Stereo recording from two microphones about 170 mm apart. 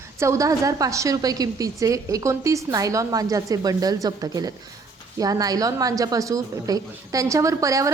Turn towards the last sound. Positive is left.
turn(degrees=-20)  # may be behind; listen again after turning